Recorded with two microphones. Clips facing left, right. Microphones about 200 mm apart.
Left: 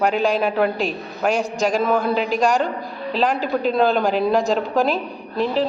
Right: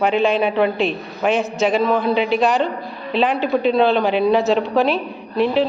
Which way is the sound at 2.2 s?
40° left (ahead or behind).